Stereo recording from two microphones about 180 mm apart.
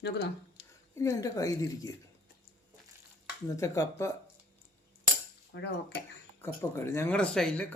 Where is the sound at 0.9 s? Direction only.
15° left (ahead or behind).